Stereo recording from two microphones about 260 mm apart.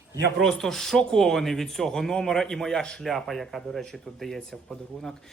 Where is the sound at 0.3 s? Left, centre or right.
Centre.